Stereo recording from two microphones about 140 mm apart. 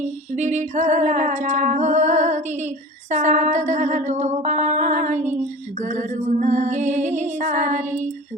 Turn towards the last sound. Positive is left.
turn(degrees=-65)  # may be behind; listen again after turning